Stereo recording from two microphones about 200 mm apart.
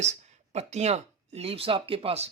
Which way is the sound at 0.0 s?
35° right (ahead or behind).